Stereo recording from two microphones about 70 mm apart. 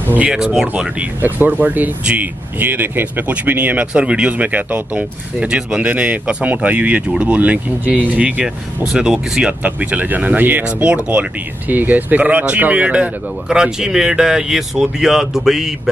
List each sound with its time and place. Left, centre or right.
0.3 s speech: centre
1.2 s speech: right
8.9 s speech: centre
13.5 s speech: centre